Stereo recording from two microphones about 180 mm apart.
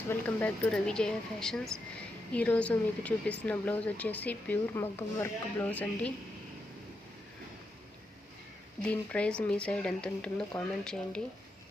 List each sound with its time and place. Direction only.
0.1 s speech: 10° left (ahead or behind)
8.8 s speech: 5° left (ahead or behind)